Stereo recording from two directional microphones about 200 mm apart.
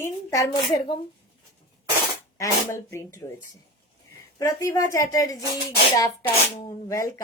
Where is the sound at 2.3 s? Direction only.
15° left (ahead or behind).